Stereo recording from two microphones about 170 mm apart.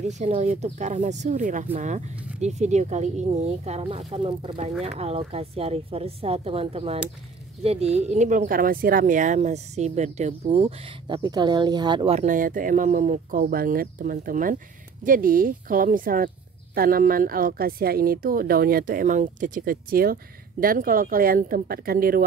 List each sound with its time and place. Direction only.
0.0 s speech: 45° right (ahead or behind)
4.6 s speech: 40° right (ahead or behind)
11.2 s speech: 25° right (ahead or behind)
12.2 s a woman's voice: 50° right (ahead or behind)